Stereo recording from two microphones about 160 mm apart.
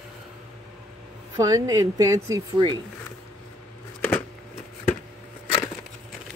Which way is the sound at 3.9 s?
10° left (ahead or behind).